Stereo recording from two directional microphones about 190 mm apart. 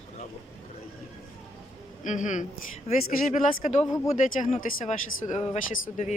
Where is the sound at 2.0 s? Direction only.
40° left (ahead or behind).